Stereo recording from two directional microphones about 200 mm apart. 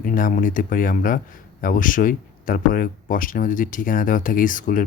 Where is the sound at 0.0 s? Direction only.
45° left (ahead or behind).